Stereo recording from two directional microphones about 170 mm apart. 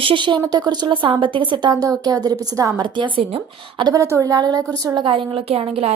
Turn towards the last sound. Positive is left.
turn(degrees=-35)  # may be behind; listen again after turning